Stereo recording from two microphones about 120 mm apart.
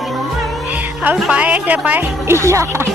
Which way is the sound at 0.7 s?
15° right (ahead or behind).